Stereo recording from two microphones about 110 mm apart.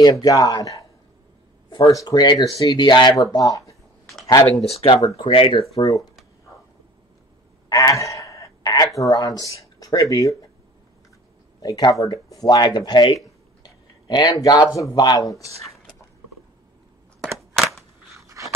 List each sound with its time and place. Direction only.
0.0 s speech: 35° left (ahead or behind)
2.7 s speech: 45° left (ahead or behind)
4.6 s speech: 70° left (ahead or behind)
5.1 s speech: 55° left (ahead or behind)
5.8 s speech: 30° left (ahead or behind)
7.7 s speech: 30° left (ahead or behind)
11.6 s speech: 40° left (ahead or behind)
17.6 s cap gun: centre (ahead or behind)
18.2 s a sound: 30° right (ahead or behind)